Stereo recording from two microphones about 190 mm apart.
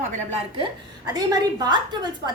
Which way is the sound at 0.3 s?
30° right (ahead or behind).